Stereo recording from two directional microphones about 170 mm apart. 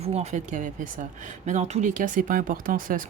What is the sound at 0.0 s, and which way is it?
Speech, 40° right (ahead or behind).